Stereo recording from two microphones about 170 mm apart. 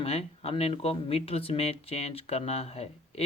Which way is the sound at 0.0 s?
35° left (ahead or behind).